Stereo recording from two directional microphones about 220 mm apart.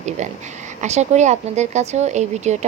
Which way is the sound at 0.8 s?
30° right (ahead or behind).